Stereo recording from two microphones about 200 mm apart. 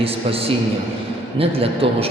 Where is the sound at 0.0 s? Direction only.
30° right (ahead or behind).